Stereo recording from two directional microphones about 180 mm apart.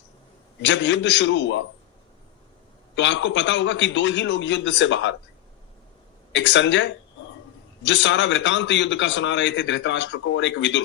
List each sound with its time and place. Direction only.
0.6 s a man's voice: 90° left
2.9 s a man's voice: 90° left
6.3 s a man's voice: 90° left